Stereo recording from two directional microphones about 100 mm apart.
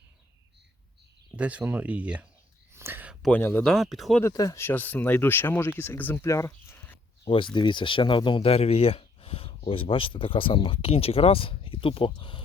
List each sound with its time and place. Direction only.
1.4 s speech: 15° right (ahead or behind)
2.7 s a sound: 25° right (ahead or behind)
3.4 s speech: 20° left (ahead or behind)
3.7 s speech: centre (ahead or behind)
4.2 s speech: 35° left (ahead or behind)
6.2 s a sound: 30° left (ahead or behind)
7.3 s speech: 55° left (ahead or behind)
8.4 s speech: 90° left; by 12.4 s 55° left (ahead or behind)